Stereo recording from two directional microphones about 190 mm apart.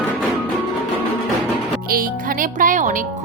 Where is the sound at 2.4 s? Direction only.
45° right (ahead or behind).